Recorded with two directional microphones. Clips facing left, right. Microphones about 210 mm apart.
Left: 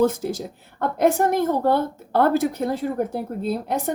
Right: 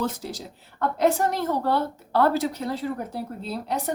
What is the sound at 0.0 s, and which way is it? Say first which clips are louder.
A woman's voice: left 9 dB; 50° left (ahead or behind).